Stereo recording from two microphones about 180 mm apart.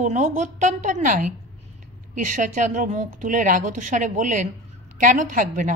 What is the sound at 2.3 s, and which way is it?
Speech, 45° right (ahead or behind).